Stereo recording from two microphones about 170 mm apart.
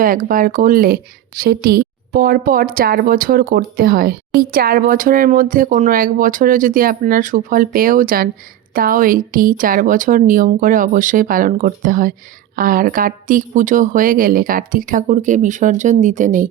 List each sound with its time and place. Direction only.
0.0 s speech: 55° right (ahead or behind)